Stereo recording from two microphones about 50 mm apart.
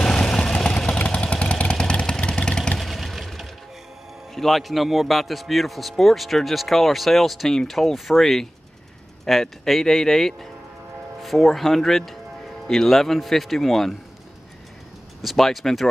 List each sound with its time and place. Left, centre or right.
0.0 s vehicle: centre
2.8 s a sound: centre
4.4 s a man's voice: centre
15.2 s a man's voice: centre